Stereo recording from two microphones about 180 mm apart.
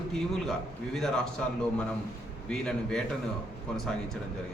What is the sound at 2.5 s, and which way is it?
Speech, 5° left (ahead or behind).